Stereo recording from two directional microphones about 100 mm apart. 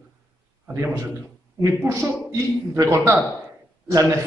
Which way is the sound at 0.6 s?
25° right (ahead or behind).